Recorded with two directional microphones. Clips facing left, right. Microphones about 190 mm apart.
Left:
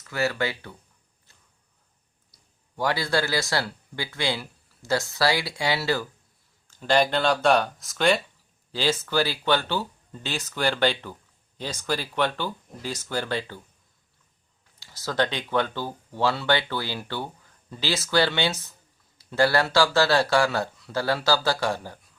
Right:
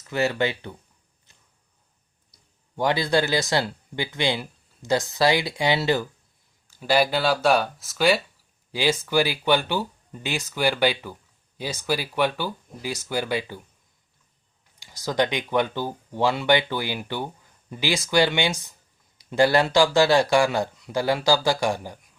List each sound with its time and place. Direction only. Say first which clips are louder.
0.0 s speech: right 3 dB; 20° right (ahead or behind)
1.3 s a sound: even; 20° right (ahead or behind)
2.7 s speech: right 3 dB; 20° right (ahead or behind)
6.7 s speech: right 1 dB; 10° right (ahead or behind)
14.8 s speech: right 2 dB; 15° right (ahead or behind)